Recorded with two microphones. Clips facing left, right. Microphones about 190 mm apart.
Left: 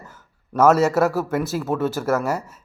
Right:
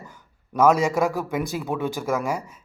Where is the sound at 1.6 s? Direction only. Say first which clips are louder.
Left 4 dB; 15° right (ahead or behind).